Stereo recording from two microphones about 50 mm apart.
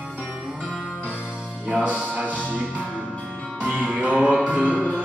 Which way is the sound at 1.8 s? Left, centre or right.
Right.